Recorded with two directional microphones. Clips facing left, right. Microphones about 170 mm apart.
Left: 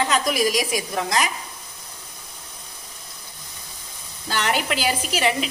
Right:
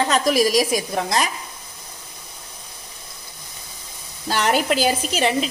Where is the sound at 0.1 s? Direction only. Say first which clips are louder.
Right 4 dB; 35° right (ahead or behind).